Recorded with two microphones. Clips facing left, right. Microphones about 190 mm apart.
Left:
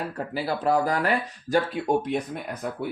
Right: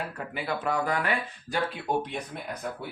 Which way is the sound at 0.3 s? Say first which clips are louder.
Left 5 dB; 35° left (ahead or behind).